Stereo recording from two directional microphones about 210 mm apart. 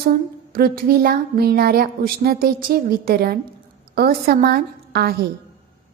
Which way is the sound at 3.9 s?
45° right (ahead or behind).